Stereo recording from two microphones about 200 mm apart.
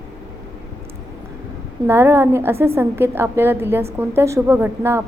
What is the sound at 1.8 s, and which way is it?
A woman's voice, 10° right (ahead or behind).